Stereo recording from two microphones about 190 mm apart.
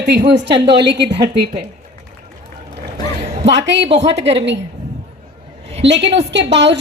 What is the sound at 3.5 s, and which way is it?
Speech, 70° right (ahead or behind).